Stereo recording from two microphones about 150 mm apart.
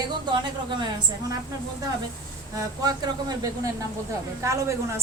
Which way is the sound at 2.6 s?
25° right (ahead or behind).